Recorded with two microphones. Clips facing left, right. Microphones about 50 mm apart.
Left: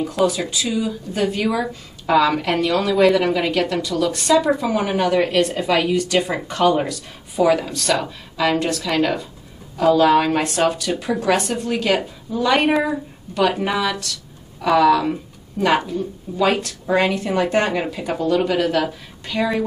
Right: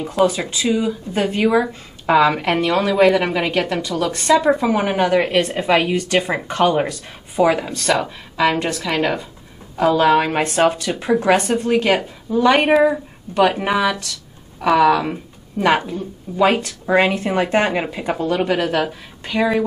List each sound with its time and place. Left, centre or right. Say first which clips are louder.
0.2 s speech: right 3 dB; right
10.4 s speech: right 3 dB; right